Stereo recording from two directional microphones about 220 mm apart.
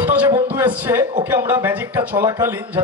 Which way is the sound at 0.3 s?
10° right (ahead or behind).